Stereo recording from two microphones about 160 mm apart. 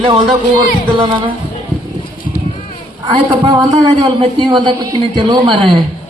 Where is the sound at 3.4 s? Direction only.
30° right (ahead or behind).